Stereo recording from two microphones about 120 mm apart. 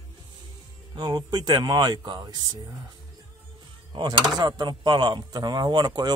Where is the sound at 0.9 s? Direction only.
35° right (ahead or behind).